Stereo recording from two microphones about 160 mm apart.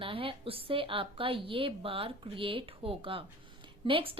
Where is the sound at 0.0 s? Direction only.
35° right (ahead or behind).